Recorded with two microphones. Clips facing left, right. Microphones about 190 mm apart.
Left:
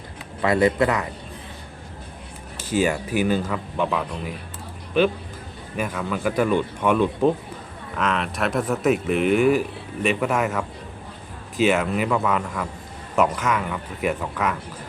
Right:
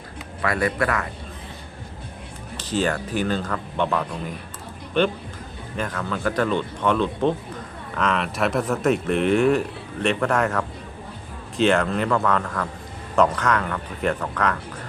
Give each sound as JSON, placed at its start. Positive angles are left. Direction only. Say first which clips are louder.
{"t": 0.4, "sound": "a man's voice", "louder": "left 4 dB", "side_deg": 20}
{"t": 2.6, "sound": "speech", "louder": "left 2 dB", "side_deg": 10}